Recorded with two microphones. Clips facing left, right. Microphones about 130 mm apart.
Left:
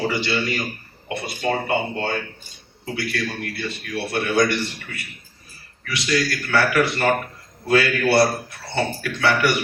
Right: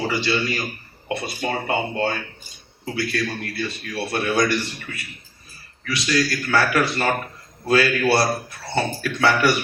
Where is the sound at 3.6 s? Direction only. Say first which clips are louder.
Right 1 dB; 25° right (ahead or behind).